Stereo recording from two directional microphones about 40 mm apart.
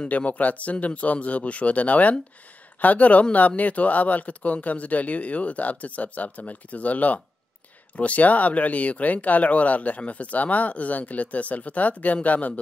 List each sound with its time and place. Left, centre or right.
0.1 s speech: left